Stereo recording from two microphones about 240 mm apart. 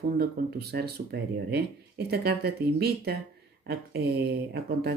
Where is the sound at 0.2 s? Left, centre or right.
Right.